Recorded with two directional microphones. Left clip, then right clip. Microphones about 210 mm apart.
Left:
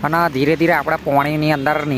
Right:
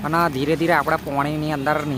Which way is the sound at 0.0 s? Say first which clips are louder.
Left 4 dB; 35° left (ahead or behind).